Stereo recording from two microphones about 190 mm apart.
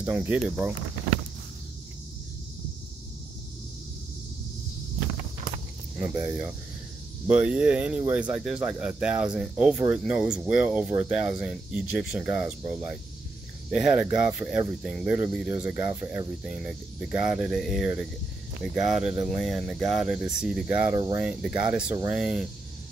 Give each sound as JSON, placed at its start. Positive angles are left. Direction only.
{"t": 0.0, "sound": "speech", "side_deg": -10}
{"t": 5.9, "sound": "speech", "side_deg": -10}
{"t": 20.9, "sound": "speech", "side_deg": -20}
{"t": 21.2, "sound": "speech", "side_deg": -5}